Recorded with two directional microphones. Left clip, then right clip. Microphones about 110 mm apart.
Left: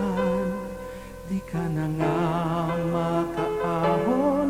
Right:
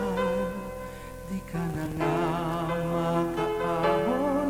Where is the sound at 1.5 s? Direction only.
20° right (ahead or behind).